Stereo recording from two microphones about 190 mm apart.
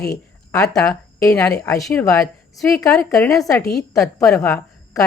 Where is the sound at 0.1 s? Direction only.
15° left (ahead or behind).